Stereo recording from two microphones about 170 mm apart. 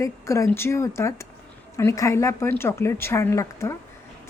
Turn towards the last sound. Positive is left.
turn(degrees=15)  # may be behind; listen again after turning